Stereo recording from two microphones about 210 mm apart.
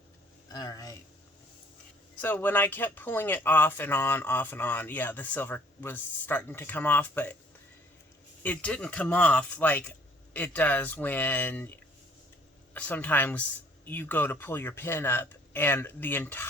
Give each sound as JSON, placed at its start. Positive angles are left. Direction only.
{"t": 0.4, "sound": "speech", "side_deg": 20}
{"t": 2.2, "sound": "speech", "side_deg": 10}
{"t": 8.4, "sound": "speech", "side_deg": 5}